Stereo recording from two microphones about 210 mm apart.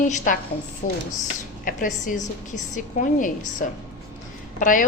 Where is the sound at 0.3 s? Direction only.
40° left (ahead or behind).